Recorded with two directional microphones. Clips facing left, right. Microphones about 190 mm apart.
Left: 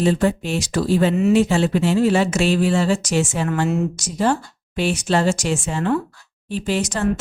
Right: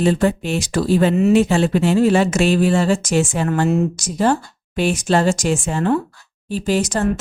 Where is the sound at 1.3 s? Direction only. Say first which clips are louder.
Right 2 dB; 55° right (ahead or behind).